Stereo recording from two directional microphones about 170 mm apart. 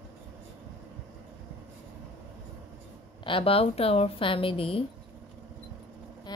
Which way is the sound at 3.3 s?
30° left (ahead or behind).